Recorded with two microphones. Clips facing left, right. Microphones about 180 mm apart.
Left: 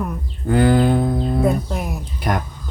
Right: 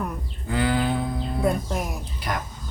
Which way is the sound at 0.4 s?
45° left (ahead or behind).